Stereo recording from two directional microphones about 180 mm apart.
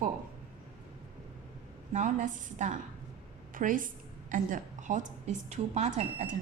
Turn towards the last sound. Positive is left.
turn(degrees=-35)  # may be behind; listen again after turning